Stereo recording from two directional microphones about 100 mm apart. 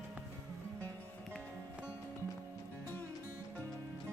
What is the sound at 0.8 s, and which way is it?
Music, 20° left (ahead or behind).